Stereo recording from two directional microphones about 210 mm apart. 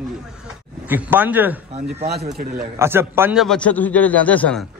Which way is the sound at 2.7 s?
10° right (ahead or behind).